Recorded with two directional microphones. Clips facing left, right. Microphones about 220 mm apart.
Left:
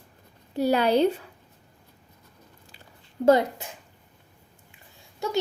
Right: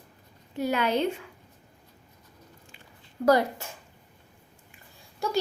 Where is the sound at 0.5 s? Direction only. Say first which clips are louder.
Left 5 dB; 35° left (ahead or behind).